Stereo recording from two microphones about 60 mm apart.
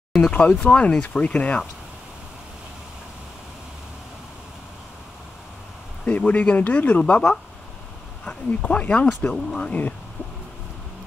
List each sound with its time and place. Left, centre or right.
0.3 s speech: left
6.0 s speech: left